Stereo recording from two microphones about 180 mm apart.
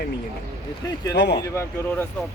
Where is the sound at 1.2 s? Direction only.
70° left (ahead or behind).